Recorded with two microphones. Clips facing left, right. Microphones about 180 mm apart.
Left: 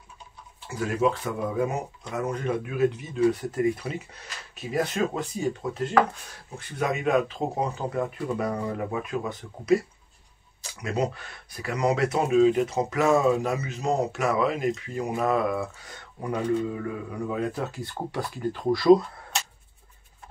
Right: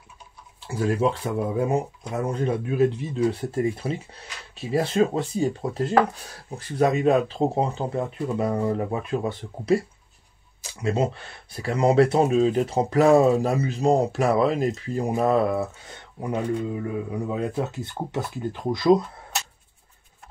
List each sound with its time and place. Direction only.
0.7 s speech: 30° right (ahead or behind)